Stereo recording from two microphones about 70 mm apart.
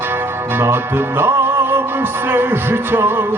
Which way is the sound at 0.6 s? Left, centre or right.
Right.